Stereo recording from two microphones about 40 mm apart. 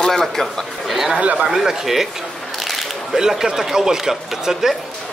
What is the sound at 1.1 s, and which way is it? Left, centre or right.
Speech, right.